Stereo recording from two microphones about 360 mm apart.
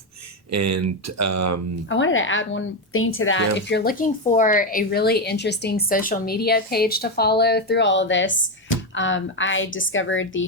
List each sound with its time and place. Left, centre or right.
0.5 s speech: right
1.9 s a woman's voice: left